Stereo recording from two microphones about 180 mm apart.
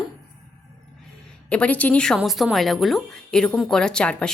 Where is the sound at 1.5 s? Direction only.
5° left (ahead or behind).